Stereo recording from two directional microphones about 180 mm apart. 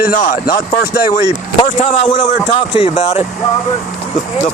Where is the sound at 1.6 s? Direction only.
35° left (ahead or behind).